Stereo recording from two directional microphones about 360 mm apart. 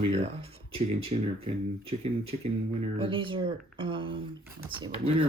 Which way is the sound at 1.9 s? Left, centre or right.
Centre.